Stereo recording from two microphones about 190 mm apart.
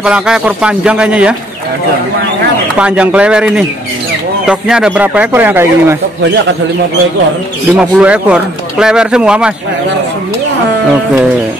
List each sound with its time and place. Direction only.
0.0 s speech: 5° right (ahead or behind)
2.8 s speech: 5° right (ahead or behind)
7.7 s speech: 5° right (ahead or behind)